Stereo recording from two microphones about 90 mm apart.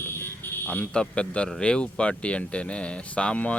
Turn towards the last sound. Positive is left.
turn(degrees=15)  # may be behind; listen again after turning